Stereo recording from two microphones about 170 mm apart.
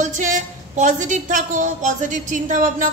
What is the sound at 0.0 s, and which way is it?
A woman's voice, 50° right (ahead or behind).